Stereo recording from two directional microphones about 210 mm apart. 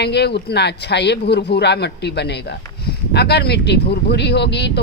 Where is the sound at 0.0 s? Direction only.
50° left (ahead or behind).